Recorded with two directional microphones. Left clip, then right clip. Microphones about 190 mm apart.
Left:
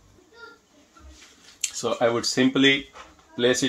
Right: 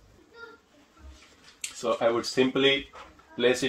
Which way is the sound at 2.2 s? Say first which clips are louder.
Left 3 dB; 40° left (ahead or behind).